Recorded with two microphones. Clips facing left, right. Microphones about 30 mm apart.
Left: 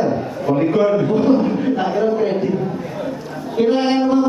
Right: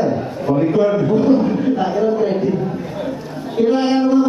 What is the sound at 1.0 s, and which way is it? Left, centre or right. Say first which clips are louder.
A woman's voice: right 1 dB; left.